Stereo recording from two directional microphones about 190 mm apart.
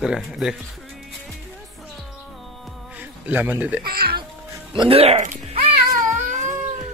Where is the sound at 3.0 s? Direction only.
10° right (ahead or behind).